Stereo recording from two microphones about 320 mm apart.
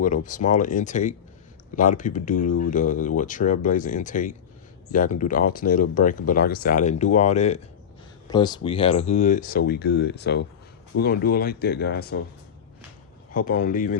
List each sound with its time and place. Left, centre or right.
0.0 s speech: left
13.3 s speech: left